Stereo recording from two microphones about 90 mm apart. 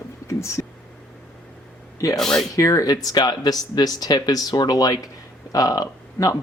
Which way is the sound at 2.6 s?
35° left (ahead or behind).